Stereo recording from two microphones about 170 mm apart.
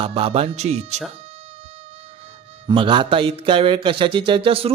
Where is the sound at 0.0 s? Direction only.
35° right (ahead or behind).